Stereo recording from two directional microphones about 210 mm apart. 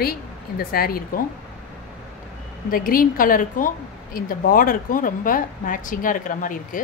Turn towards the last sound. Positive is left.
turn(degrees=40)  # may be behind; listen again after turning